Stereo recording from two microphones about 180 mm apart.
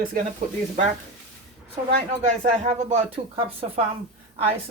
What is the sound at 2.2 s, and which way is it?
Speech, 40° right (ahead or behind).